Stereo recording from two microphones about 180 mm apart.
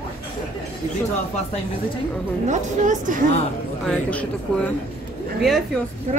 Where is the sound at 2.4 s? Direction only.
40° right (ahead or behind).